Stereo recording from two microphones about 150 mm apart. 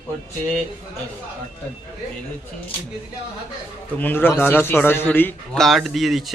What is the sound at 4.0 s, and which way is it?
Speech, 10° left (ahead or behind).